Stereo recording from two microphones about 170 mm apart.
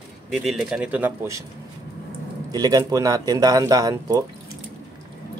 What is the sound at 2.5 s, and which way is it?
Speech, 25° right (ahead or behind).